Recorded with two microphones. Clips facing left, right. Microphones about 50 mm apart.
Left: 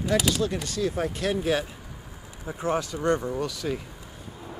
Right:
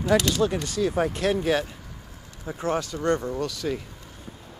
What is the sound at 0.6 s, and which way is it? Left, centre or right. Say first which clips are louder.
Speech: right 3 dB; centre.